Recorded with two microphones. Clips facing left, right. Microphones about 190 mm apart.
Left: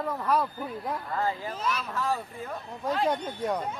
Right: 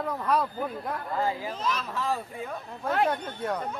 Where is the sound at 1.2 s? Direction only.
10° right (ahead or behind).